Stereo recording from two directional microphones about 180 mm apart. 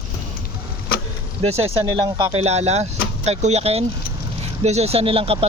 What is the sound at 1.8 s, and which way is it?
Speech, 25° right (ahead or behind).